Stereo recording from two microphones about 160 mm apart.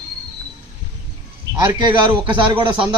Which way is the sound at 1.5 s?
20° left (ahead or behind).